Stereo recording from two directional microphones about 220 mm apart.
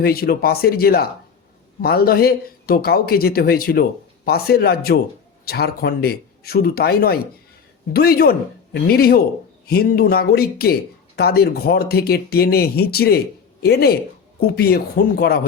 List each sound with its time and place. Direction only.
0.0 s speech: 45° left (ahead or behind)